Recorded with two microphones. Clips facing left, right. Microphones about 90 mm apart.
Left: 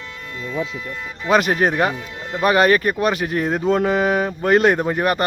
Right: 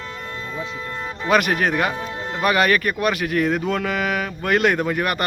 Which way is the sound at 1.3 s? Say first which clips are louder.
Left 2 dB; 25° left (ahead or behind).